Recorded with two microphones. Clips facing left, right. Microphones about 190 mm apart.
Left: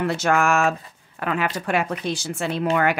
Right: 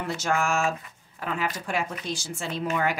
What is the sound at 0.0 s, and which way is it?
Speech, 70° left (ahead or behind).